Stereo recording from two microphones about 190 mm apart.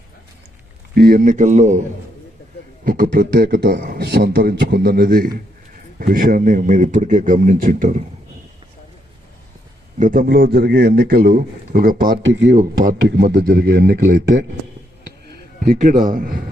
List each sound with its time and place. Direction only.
0.9 s a man's voice: 50° right (ahead or behind)
2.8 s a man's voice: 45° right (ahead or behind)
10.0 s a man's voice: 45° right (ahead or behind)
12.2 s speech: 70° right (ahead or behind)
12.5 s a man's voice: 45° right (ahead or behind)
13.1 s a man's voice: 55° right (ahead or behind)
15.6 s a man's voice: 50° right (ahead or behind)